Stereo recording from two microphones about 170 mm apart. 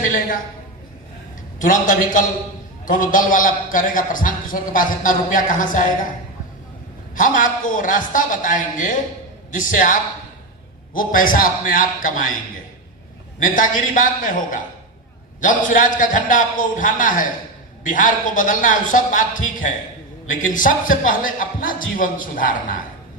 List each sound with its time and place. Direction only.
1.5 s a man's voice: 50° left (ahead or behind)
7.2 s a man's voice: 50° left (ahead or behind)
13.4 s a man's voice: 50° left (ahead or behind)